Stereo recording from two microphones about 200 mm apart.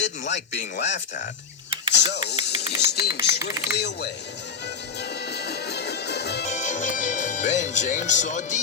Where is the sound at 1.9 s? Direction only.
60° left (ahead or behind).